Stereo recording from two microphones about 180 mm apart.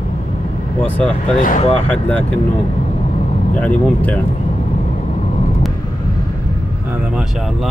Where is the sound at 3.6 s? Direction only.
10° left (ahead or behind).